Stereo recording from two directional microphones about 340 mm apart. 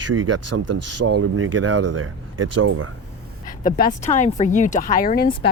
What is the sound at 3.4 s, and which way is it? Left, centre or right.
Speech, left.